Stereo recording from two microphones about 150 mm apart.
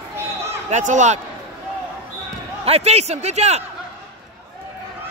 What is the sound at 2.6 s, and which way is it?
A man's voice, 45° right (ahead or behind).